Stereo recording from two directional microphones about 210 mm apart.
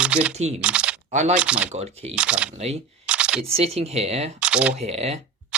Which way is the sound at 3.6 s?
30° right (ahead or behind).